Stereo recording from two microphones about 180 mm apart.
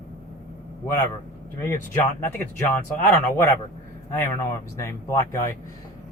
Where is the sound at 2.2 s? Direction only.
10° left (ahead or behind).